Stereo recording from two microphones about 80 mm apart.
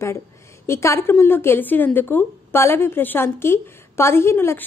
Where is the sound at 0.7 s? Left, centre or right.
Left.